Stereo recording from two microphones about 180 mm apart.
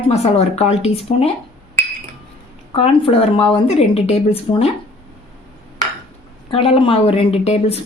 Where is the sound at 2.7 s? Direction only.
30° left (ahead or behind).